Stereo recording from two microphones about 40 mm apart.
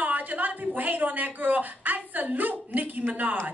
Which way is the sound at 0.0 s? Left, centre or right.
Right.